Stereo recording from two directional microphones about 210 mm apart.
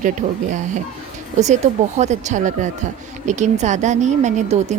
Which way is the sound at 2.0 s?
35° right (ahead or behind).